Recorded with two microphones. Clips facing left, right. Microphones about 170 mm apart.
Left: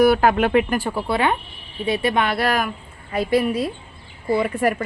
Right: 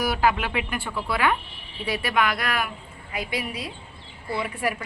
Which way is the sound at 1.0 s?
25° left (ahead or behind).